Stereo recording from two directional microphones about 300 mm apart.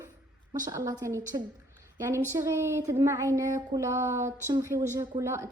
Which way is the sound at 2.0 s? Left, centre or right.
Centre.